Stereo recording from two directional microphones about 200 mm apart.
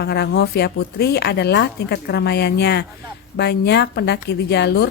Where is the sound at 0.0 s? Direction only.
55° left (ahead or behind).